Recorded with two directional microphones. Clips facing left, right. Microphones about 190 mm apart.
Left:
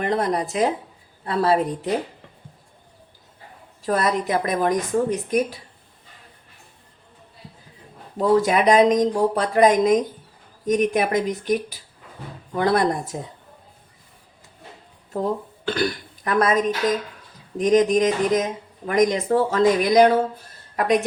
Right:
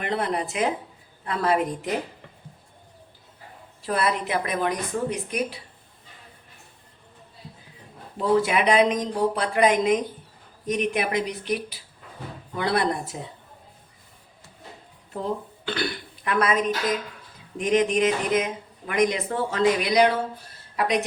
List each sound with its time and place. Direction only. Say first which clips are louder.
0.0 s speech: left 4 dB; 40° left (ahead or behind)
3.8 s speech: left 3 dB; 40° left (ahead or behind)
8.2 s speech: left 4 dB; 45° left (ahead or behind)
15.6 s a woman's voice: left 7 dB; 45° left (ahead or behind)